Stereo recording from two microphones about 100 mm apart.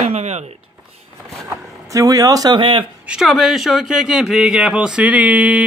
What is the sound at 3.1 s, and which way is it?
Speech, 5° right (ahead or behind).